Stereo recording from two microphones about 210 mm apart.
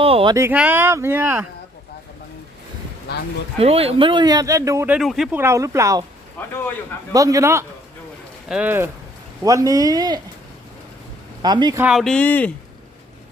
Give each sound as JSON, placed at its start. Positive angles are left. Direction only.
{"t": 0.0, "sound": "speech", "side_deg": -25}
{"t": 0.3, "sound": "speech", "side_deg": -10}
{"t": 3.6, "sound": "speech", "side_deg": -30}
{"t": 4.9, "sound": "speech", "side_deg": 0}
{"t": 6.4, "sound": "a man's voice", "side_deg": 5}
{"t": 7.1, "sound": "speech", "side_deg": -15}
{"t": 11.4, "sound": "speech", "side_deg": -20}
{"t": 11.8, "sound": "speech", "side_deg": -5}